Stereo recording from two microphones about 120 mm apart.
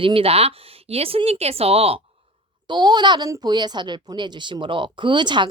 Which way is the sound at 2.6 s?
35° right (ahead or behind).